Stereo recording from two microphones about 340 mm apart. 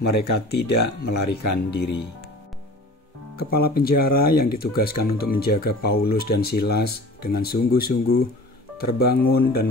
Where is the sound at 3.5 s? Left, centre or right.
Left.